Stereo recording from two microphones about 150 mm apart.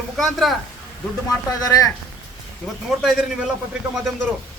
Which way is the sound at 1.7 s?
25° left (ahead or behind).